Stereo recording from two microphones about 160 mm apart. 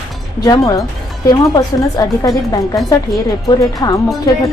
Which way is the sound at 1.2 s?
25° left (ahead or behind).